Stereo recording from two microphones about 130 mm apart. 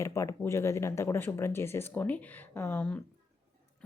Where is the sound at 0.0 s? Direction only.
25° left (ahead or behind).